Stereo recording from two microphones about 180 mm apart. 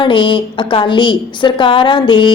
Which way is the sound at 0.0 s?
30° left (ahead or behind).